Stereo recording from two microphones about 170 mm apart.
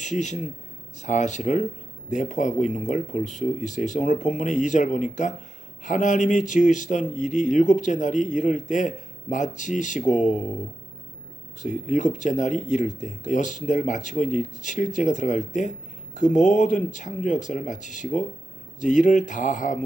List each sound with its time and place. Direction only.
0.0 s a man's voice: 45° left (ahead or behind)
10.2 s speech: centre (ahead or behind)
11.6 s speech: 45° left (ahead or behind)